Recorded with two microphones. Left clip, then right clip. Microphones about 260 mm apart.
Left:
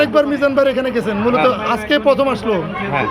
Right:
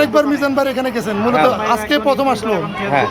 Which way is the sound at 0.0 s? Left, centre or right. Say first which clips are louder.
Even; centre.